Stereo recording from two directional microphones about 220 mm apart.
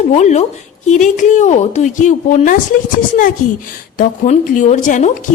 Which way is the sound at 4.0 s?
35° left (ahead or behind).